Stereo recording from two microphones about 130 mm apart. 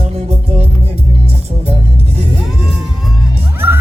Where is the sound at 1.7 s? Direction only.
50° right (ahead or behind).